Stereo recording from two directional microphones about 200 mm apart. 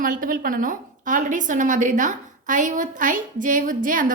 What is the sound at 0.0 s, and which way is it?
A woman's voice, 45° right (ahead or behind).